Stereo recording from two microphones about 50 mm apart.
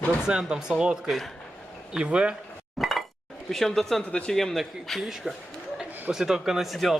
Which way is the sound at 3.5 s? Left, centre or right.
Centre.